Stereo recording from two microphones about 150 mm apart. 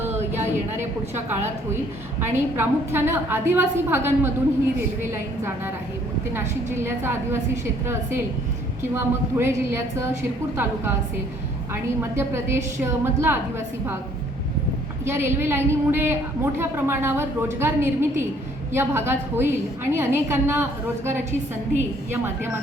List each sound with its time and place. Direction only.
0.0 s a sound: 15° right (ahead or behind)
2.3 s a woman's voice: 15° right (ahead or behind)
8.8 s a woman's voice: 15° right (ahead or behind)
11.7 s a woman's voice: 15° right (ahead or behind)
15.0 s a woman's voice: 15° right (ahead or behind)